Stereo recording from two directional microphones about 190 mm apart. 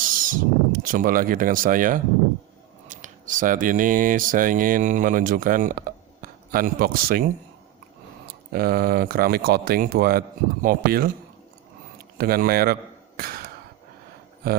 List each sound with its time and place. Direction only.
0.0 s speech: 45° right (ahead or behind)
8.3 s speech: 50° right (ahead or behind)
12.1 s speech: 50° right (ahead or behind)
13.1 s a sound: 50° right (ahead or behind)